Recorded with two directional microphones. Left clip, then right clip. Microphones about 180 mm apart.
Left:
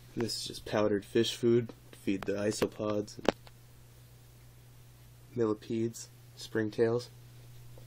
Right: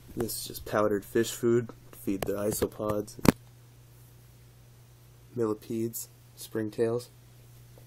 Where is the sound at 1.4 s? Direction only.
15° right (ahead or behind).